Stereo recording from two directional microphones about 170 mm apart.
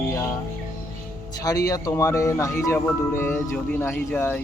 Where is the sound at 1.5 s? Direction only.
20° left (ahead or behind).